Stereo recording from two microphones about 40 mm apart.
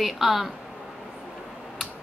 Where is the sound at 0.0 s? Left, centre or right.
Centre.